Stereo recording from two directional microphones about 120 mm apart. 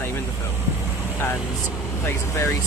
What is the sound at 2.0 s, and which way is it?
Speech, 25° left (ahead or behind).